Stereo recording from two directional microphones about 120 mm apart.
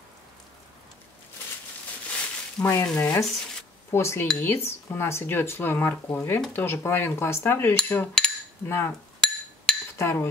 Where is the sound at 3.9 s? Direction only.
20° left (ahead or behind).